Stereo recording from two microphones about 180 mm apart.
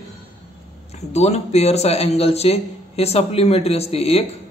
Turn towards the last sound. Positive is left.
turn(degrees=35)  # may be behind; listen again after turning